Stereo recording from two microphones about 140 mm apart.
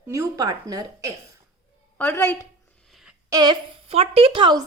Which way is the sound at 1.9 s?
15° left (ahead or behind).